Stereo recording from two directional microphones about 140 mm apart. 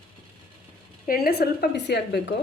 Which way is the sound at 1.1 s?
90° left.